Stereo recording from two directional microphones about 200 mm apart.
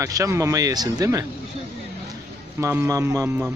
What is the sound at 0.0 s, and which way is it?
Speech, 15° right (ahead or behind).